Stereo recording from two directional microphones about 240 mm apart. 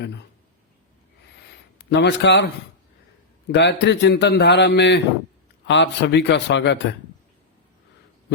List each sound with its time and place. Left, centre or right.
1.9 s a man's voice: left
3.5 s a man's voice: left